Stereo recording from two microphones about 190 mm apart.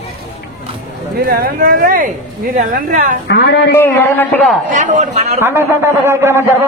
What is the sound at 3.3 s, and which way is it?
Speech, 65° left (ahead or behind).